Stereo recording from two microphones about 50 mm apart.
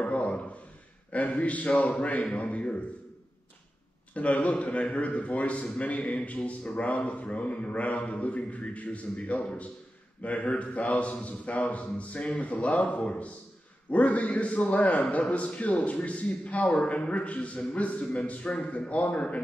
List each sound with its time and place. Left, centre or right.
0.0 s a sound: left
1.4 s a man's voice: left
4.1 s a man's voice: left